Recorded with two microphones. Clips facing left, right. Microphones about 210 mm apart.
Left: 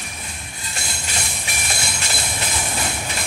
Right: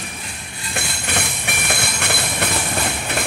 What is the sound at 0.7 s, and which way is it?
Train, 60° right (ahead or behind).